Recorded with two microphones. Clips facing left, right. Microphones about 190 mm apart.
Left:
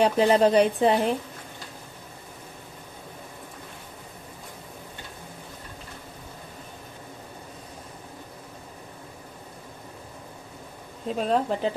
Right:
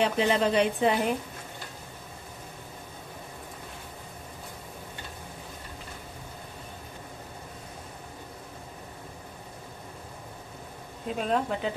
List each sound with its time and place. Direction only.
0.0 s a woman's voice: 40° left (ahead or behind)
11.1 s a woman's voice: 35° left (ahead or behind)